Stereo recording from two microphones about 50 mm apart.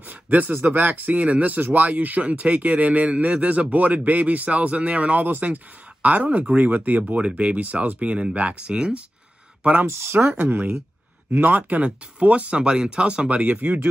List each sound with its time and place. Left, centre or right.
0.1 s a sound: right
0.6 s speech: right
9.8 s speech: right
10.3 s speech: right